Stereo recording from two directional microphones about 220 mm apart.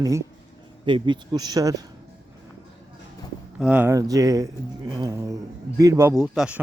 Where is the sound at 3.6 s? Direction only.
5° right (ahead or behind).